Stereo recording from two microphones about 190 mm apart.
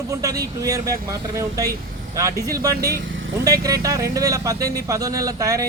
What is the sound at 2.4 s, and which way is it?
Speech, 15° right (ahead or behind).